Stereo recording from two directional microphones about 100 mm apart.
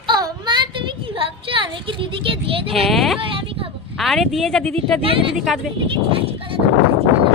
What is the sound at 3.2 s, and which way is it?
Speech, 60° right (ahead or behind).